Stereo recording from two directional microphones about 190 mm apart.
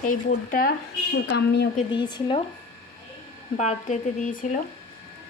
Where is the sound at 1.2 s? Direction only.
65° left (ahead or behind).